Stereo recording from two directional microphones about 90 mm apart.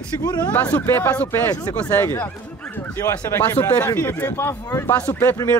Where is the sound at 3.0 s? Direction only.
30° left (ahead or behind).